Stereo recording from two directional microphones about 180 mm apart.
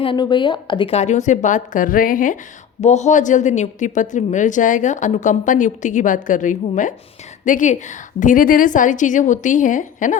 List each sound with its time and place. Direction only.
0.0 s a woman's voice: 25° left (ahead or behind); by 10.2 s 45° left (ahead or behind)